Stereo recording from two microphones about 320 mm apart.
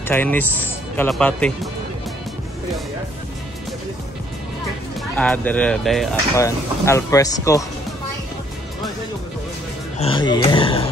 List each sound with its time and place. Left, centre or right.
0.1 s speech: centre
5.1 s speech: centre
9.9 s speech: centre